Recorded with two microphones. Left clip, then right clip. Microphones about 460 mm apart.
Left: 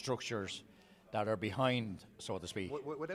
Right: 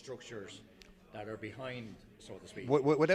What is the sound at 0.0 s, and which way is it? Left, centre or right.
A man's voice, left.